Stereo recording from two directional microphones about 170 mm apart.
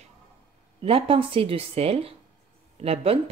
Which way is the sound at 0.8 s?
35° right (ahead or behind).